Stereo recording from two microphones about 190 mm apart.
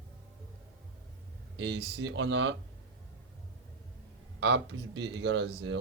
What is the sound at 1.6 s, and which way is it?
Speech, 70° right (ahead or behind).